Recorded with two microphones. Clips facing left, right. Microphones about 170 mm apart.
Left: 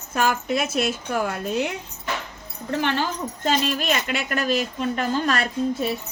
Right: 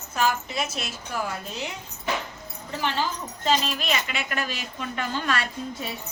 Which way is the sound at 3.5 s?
50° left (ahead or behind).